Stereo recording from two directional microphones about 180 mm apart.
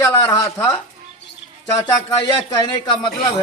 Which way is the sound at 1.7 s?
20° left (ahead or behind).